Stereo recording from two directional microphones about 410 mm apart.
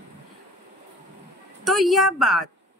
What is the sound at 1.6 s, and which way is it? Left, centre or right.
Speech, centre.